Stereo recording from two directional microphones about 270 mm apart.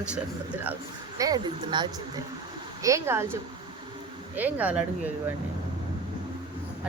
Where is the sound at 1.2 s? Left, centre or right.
Centre.